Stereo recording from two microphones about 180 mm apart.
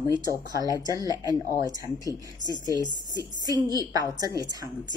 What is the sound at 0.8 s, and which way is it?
Speech, 20° right (ahead or behind).